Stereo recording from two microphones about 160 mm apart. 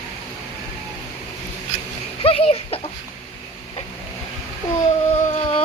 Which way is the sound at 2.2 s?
40° left (ahead or behind).